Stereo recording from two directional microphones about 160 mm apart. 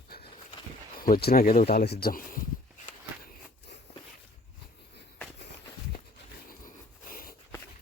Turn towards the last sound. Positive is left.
turn(degrees=60)  # may be behind; listen again after turning